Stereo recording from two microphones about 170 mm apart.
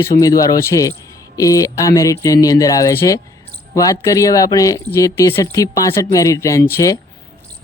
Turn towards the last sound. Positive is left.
turn(degrees=15)  # may be behind; listen again after turning